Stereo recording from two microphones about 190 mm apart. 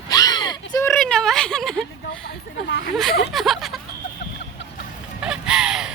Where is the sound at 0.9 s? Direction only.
Centre (ahead or behind).